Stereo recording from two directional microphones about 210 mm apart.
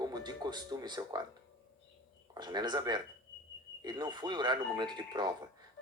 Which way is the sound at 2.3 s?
20° right (ahead or behind).